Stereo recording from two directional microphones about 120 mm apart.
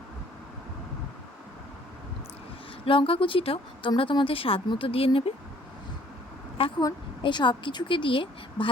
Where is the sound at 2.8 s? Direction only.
50° left (ahead or behind).